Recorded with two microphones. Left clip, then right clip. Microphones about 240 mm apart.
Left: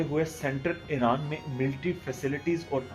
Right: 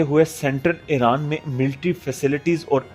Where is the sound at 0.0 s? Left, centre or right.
Right.